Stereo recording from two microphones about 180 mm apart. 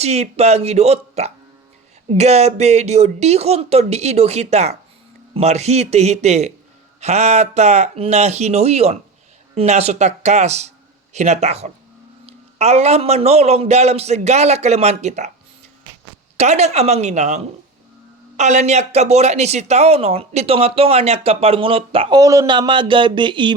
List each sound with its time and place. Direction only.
0.0 s speech: 35° right (ahead or behind)
16.4 s speech: 40° right (ahead or behind)
22.2 s speech: 20° right (ahead or behind)